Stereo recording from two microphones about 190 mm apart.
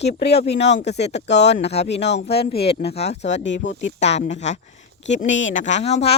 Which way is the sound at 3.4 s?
75° left (ahead or behind).